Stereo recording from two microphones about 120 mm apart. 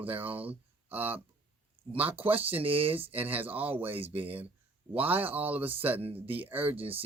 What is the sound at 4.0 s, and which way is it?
Speech, 50° right (ahead or behind).